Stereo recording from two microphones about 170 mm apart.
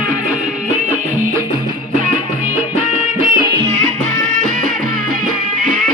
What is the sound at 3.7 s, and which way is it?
Music, 45° right (ahead or behind).